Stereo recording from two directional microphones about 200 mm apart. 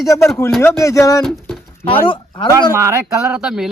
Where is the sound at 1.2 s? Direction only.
Centre (ahead or behind).